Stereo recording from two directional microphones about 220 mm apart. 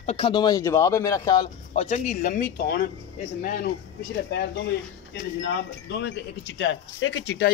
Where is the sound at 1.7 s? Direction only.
30° left (ahead or behind).